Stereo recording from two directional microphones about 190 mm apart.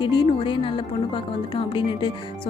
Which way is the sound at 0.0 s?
25° left (ahead or behind).